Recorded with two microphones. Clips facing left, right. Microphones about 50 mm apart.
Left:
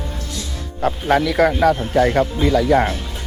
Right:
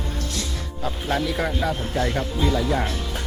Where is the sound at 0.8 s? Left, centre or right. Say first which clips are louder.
Left 8 dB; left.